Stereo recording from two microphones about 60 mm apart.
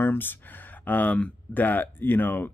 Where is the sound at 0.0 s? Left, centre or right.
Left.